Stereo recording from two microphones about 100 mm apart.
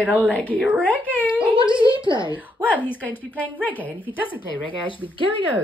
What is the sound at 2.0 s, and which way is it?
Speech, 50° right (ahead or behind).